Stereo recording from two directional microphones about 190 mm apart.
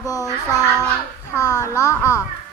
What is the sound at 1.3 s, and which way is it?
Music, 20° left (ahead or behind).